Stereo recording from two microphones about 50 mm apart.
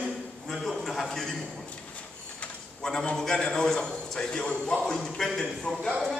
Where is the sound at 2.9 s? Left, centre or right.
Centre.